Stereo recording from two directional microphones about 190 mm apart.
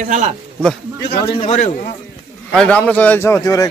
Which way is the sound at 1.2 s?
30° left (ahead or behind).